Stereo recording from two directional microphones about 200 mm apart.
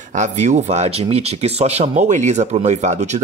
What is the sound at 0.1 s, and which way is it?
Speech, 35° right (ahead or behind).